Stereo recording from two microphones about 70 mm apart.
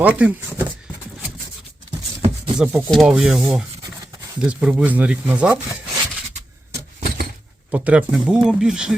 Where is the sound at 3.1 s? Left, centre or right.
Centre.